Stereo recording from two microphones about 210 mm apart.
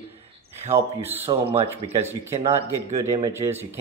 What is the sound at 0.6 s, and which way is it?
Speech, 30° right (ahead or behind).